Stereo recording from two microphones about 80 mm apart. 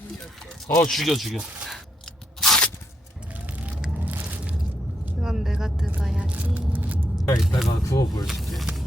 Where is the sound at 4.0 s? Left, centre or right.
Right.